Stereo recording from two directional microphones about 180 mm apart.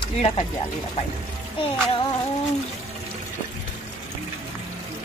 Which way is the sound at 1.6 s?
30° left (ahead or behind).